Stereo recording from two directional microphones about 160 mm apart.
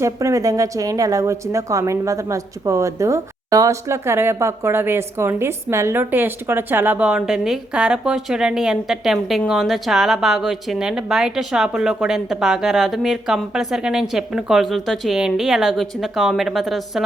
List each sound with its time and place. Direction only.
0.0 s a woman's voice: 20° right (ahead or behind); by 17.0 s centre (ahead or behind)